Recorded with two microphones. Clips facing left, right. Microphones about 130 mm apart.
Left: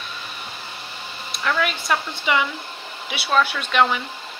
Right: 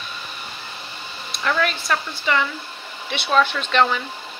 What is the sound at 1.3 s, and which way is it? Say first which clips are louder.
Speech: right 1 dB; centre (ahead or behind).